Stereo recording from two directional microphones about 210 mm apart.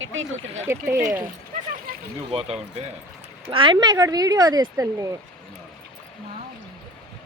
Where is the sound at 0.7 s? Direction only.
15° right (ahead or behind).